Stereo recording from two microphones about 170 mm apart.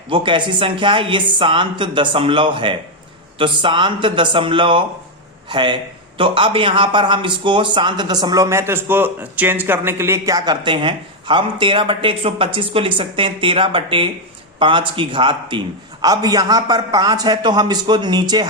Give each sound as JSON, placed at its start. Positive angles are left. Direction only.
{"t": 0.1, "sound": "a man's voice", "side_deg": -30}